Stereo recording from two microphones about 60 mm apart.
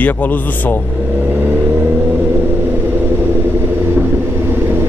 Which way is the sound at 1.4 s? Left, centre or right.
Right.